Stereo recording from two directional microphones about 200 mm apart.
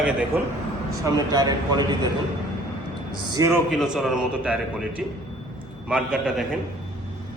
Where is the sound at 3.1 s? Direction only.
20° right (ahead or behind).